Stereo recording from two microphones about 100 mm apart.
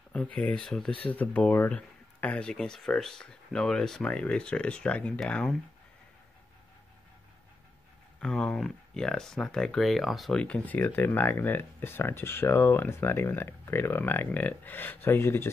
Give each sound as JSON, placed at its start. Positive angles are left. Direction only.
{"t": 0.1, "sound": "speech", "side_deg": 10}
{"t": 8.2, "sound": "speech", "side_deg": 5}